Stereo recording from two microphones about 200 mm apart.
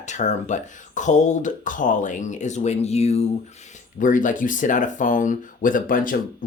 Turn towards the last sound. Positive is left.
turn(degrees=45)  # may be behind; listen again after turning